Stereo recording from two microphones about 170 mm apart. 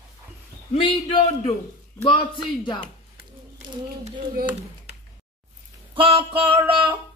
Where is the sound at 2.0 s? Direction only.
30° left (ahead or behind).